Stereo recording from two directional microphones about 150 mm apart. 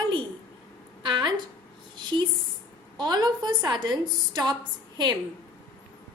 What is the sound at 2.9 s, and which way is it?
A woman's voice, 30° right (ahead or behind).